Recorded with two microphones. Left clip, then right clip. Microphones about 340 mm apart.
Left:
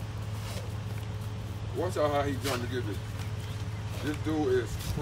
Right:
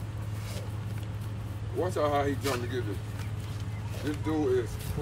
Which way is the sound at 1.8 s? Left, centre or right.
Centre.